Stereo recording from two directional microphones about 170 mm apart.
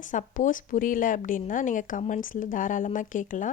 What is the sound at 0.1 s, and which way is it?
Speech, 50° left (ahead or behind).